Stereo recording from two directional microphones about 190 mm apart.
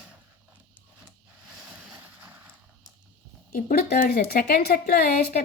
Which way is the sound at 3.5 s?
50° left (ahead or behind).